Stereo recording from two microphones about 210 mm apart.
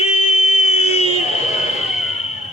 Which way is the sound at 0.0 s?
30° left (ahead or behind).